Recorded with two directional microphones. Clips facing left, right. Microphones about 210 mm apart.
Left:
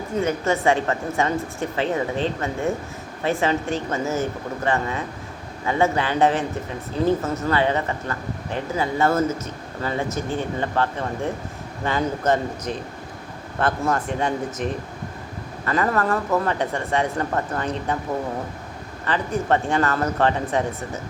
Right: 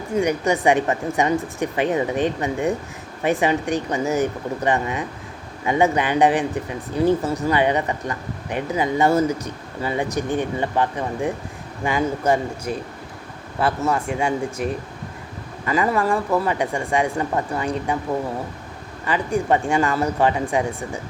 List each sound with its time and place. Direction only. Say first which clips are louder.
0.2 s speech: right 2 dB; 15° right (ahead or behind)
19.0 s speech: right 2 dB; 10° right (ahead or behind)